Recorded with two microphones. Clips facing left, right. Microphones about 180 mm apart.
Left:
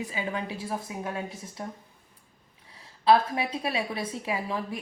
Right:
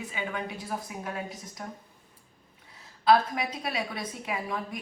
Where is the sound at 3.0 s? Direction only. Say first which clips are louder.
Left 1 dB; 30° left (ahead or behind).